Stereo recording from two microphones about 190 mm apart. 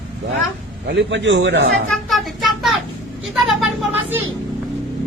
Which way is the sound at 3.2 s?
5° right (ahead or behind).